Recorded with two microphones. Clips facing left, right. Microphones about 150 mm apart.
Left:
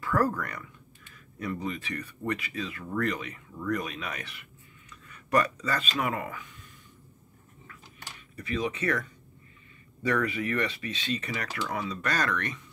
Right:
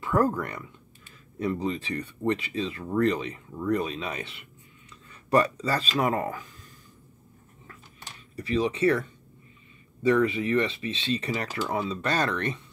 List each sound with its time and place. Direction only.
0.0 s speech: 25° right (ahead or behind)
8.4 s speech: 30° right (ahead or behind)